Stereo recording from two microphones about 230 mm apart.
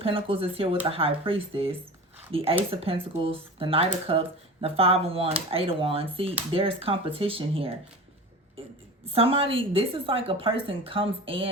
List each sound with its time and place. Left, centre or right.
0.0 s a woman's voice: right
9.0 s a woman's voice: right